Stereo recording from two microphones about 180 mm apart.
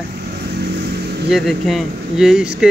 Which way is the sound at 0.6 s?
65° right (ahead or behind).